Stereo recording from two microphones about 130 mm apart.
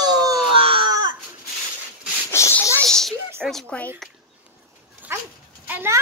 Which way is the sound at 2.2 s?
20° left (ahead or behind).